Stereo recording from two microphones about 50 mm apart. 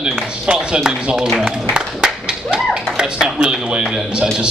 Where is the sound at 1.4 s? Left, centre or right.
Centre.